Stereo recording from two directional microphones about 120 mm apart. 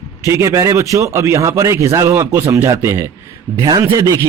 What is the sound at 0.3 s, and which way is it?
Speech, 25° right (ahead or behind).